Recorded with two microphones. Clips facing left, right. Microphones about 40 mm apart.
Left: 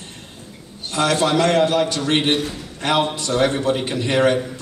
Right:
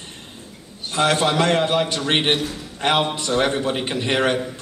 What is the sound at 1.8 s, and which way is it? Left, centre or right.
A man's voice, right.